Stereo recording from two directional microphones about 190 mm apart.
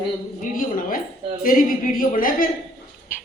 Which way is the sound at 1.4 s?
50° left (ahead or behind).